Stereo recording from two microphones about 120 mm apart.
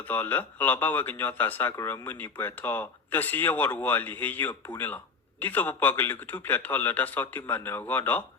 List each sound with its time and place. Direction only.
0.1 s speech: 15° left (ahead or behind)